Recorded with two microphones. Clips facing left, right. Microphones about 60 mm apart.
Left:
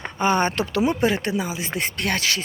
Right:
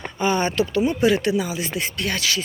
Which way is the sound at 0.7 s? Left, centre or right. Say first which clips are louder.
Even; left.